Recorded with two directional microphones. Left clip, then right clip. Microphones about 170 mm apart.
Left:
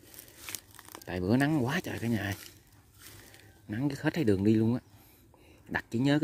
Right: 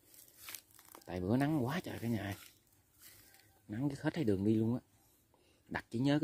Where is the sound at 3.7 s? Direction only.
5° left (ahead or behind).